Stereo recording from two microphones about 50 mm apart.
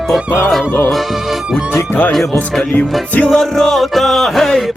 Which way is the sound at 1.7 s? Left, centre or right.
Left.